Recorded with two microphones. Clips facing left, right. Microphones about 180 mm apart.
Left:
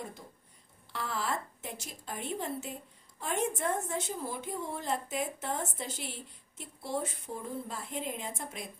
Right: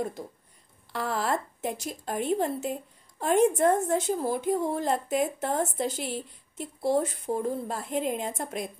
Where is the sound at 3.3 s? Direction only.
65° right (ahead or behind).